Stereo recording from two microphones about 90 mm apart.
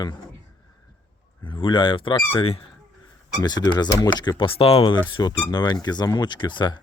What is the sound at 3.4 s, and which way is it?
Speech, 50° left (ahead or behind).